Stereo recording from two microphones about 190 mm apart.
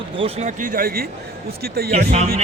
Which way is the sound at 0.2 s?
35° right (ahead or behind).